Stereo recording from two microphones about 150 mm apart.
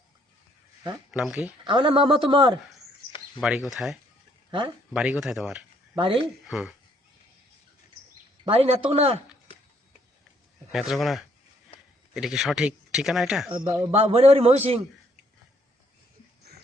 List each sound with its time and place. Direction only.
1.1 s speech: 5° right (ahead or behind)
1.6 s a man's voice: 35° right (ahead or behind)
3.4 s speech: centre (ahead or behind)
4.9 s speech: 5° right (ahead or behind)
5.9 s speech: 30° right (ahead or behind)
6.1 s speech: centre (ahead or behind)
8.4 s a man's voice: 40° right (ahead or behind)
10.7 s speech: centre (ahead or behind)
13.5 s a man's voice: 30° right (ahead or behind)